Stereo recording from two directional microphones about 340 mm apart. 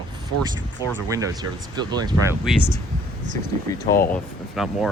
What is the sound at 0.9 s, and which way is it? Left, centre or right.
Speech, centre.